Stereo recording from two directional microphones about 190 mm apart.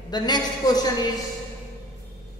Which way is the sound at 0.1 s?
20° left (ahead or behind).